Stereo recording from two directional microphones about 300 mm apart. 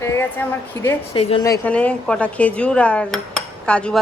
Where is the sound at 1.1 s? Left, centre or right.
Centre.